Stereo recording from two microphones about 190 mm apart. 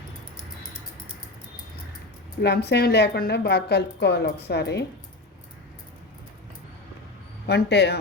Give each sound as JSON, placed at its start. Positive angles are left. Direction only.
{"t": 2.4, "sound": "a woman's voice", "side_deg": 60}
{"t": 7.4, "sound": "a man's voice", "side_deg": 60}